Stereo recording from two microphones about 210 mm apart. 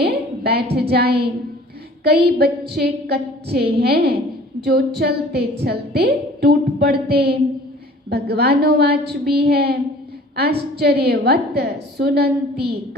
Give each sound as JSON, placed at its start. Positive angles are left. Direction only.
{"t": 0.0, "sound": "a sound", "side_deg": -50}
{"t": 0.8, "sound": "a woman's voice", "side_deg": -50}
{"t": 10.8, "sound": "a woman's voice", "side_deg": -50}